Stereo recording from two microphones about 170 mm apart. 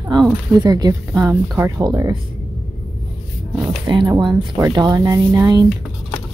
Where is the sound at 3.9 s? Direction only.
25° right (ahead or behind).